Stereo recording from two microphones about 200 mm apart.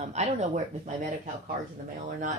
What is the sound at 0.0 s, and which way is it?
Speech, 35° right (ahead or behind).